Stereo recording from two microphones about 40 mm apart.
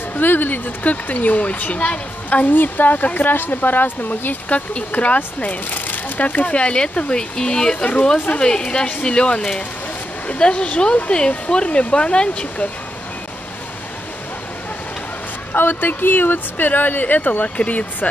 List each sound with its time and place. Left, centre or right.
0.1 s speech: left
2.4 s speech: left
4.5 s speech: left
7.7 s speech: left
8.4 s speech: left
15.5 s speech: left
17.6 s speech: left